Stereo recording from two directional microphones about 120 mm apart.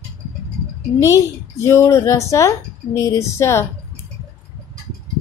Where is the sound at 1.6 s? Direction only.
20° left (ahead or behind).